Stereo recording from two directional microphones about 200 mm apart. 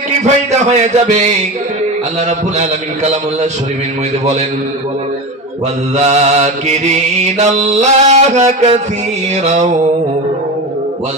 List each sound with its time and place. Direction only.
0.2 s mantra: 35° right (ahead or behind)
5.9 s mantra: 35° right (ahead or behind)